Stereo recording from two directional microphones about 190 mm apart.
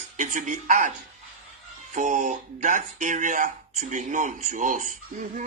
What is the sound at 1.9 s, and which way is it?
Speech, 40° right (ahead or behind).